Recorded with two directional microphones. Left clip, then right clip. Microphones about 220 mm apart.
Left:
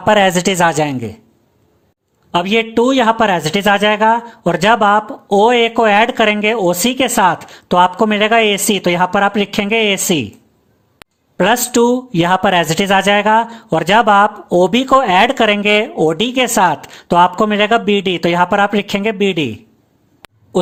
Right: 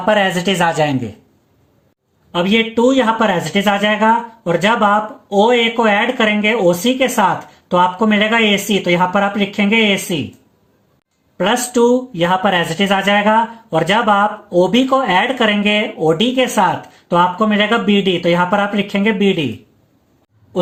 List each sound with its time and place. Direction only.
0.0 s speech: 40° left (ahead or behind)
2.3 s speech: 50° left (ahead or behind)
11.3 s speech: 50° left (ahead or behind)